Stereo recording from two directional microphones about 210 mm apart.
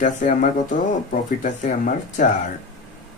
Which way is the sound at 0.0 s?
40° left (ahead or behind).